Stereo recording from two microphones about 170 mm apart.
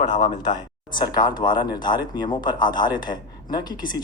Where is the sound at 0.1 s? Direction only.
25° left (ahead or behind).